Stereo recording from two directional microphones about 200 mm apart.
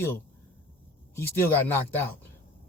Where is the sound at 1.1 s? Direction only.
10° left (ahead or behind).